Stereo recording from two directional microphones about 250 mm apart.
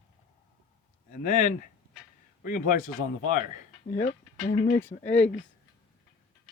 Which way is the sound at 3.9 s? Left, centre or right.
Left.